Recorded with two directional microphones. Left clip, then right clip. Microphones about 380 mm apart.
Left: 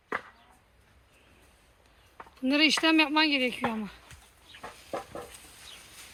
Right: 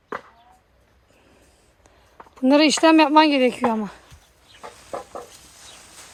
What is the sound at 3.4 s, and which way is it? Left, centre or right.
Speech, right.